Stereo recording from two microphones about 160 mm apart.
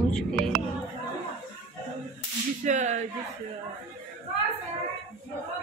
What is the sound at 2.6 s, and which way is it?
Whip, 50° right (ahead or behind).